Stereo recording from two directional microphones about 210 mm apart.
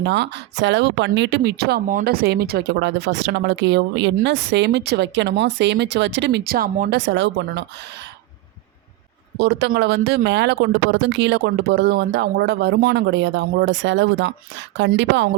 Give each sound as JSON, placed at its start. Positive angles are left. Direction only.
{"t": 0.0, "sound": "speech", "side_deg": -55}
{"t": 7.0, "sound": "speech", "side_deg": -60}
{"t": 9.4, "sound": "speech", "side_deg": -50}